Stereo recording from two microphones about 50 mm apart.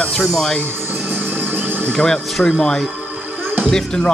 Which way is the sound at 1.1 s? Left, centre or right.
Right.